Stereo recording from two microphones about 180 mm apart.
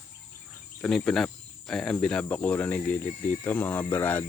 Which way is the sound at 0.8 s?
5° left (ahead or behind).